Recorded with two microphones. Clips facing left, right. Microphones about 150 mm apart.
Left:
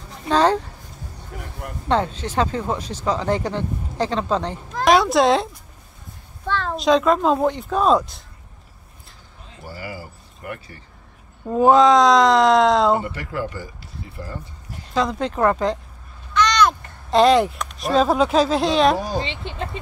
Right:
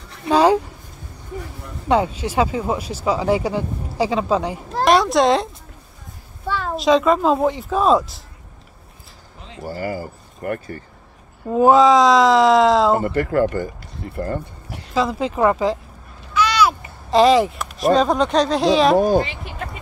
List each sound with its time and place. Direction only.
0.3 s speech: 10° right (ahead or behind)
1.9 s speech: 10° right (ahead or behind)
4.8 s a sound: centre (ahead or behind)
6.4 s speech: 10° right (ahead or behind)
9.7 s speech: 45° right (ahead or behind)
11.4 s speech: 5° right (ahead or behind)
13.0 s speech: 50° right (ahead or behind)
15.0 s speech: 5° right (ahead or behind)
18.9 s speech: 55° right (ahead or behind)
19.2 s speech: 25° left (ahead or behind)